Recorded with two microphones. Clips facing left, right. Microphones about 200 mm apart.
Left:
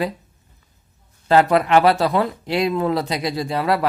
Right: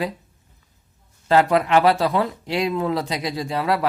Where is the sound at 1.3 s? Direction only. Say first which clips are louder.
Left 2 dB; 60° left (ahead or behind).